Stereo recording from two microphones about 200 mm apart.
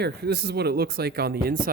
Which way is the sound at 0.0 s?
55° right (ahead or behind).